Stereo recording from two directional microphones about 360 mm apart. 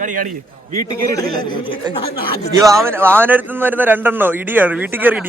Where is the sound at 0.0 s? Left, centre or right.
Right.